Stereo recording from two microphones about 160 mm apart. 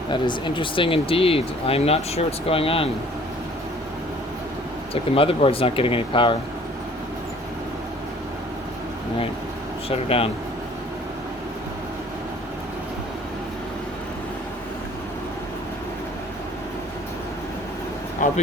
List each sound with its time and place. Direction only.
0.1 s speech: 30° left (ahead or behind)
5.1 s speech: 35° left (ahead or behind)
9.9 s speech: 35° left (ahead or behind)
18.2 s a sound: 55° left (ahead or behind)